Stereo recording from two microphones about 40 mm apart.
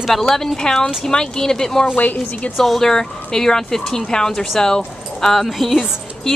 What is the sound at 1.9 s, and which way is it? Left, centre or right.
Speech, left.